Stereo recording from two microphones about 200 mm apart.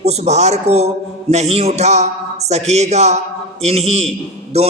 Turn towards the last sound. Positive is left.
turn(degrees=-30)  # may be behind; listen again after turning